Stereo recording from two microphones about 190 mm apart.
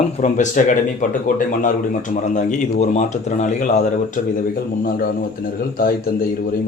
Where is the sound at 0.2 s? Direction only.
40° left (ahead or behind).